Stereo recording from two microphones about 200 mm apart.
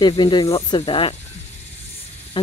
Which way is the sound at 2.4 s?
25° left (ahead or behind).